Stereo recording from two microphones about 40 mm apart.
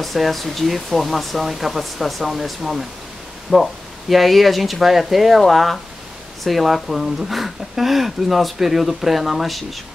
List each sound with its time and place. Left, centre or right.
0.0 s speech: centre